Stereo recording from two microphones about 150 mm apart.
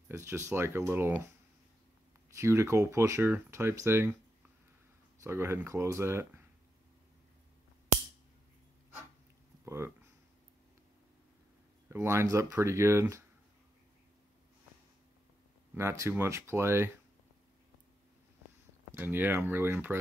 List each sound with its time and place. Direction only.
0.1 s speech: 20° right (ahead or behind)
2.3 s speech: 20° right (ahead or behind)
5.2 s speech: 15° right (ahead or behind)
9.7 s speech: 15° right (ahead or behind)
11.9 s speech: 15° right (ahead or behind)
15.7 s speech: 15° right (ahead or behind)
18.9 s speech: 15° right (ahead or behind)